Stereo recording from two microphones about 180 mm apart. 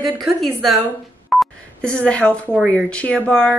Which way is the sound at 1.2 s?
Centre (ahead or behind).